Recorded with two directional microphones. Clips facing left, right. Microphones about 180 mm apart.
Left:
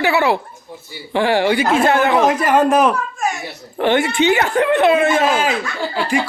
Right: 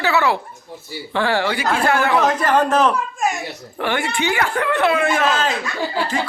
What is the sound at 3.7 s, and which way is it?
Speech, 20° left (ahead or behind).